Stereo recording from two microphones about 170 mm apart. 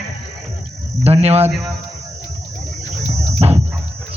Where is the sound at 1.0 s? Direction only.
40° right (ahead or behind).